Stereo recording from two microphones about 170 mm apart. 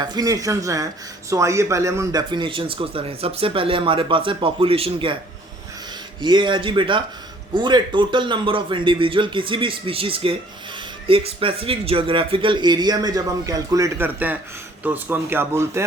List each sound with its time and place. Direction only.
0.0 s a man's voice: 25° right (ahead or behind)
6.2 s speech: 25° right (ahead or behind)